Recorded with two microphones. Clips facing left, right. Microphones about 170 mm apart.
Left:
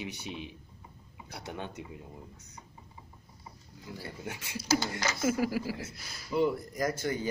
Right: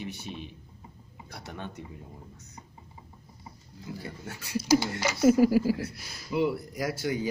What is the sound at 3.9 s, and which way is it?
Speech, 25° right (ahead or behind).